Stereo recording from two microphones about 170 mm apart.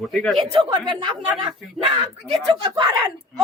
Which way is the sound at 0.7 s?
25° right (ahead or behind).